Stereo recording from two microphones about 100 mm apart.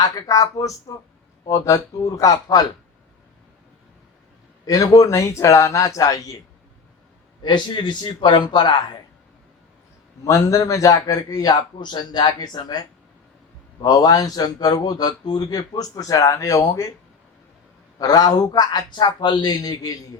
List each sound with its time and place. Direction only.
0.0 s speech: 35° left (ahead or behind)
4.6 s speech: 35° left (ahead or behind)
7.4 s a man's voice: 50° left (ahead or behind)
10.2 s speech: 30° left (ahead or behind)
13.8 s speech: 40° left (ahead or behind)
18.0 s a man's voice: 40° left (ahead or behind)